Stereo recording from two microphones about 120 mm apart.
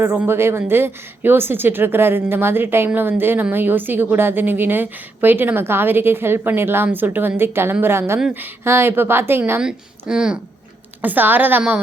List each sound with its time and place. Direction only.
0.0 s a woman's voice: 20° right (ahead or behind)
9.6 s a woman's voice: 5° right (ahead or behind)